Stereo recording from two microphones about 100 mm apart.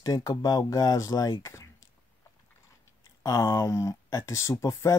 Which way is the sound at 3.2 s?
35° left (ahead or behind).